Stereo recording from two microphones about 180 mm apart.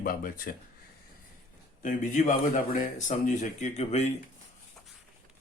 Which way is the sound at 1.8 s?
45° left (ahead or behind).